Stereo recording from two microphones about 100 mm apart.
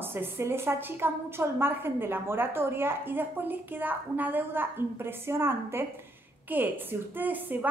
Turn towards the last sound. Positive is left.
turn(degrees=-20)  # may be behind; listen again after turning